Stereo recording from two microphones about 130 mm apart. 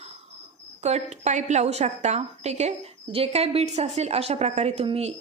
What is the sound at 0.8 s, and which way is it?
A woman's voice, 60° right (ahead or behind).